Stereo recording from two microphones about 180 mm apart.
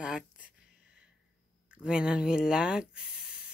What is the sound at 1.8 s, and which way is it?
Speech, 5° right (ahead or behind).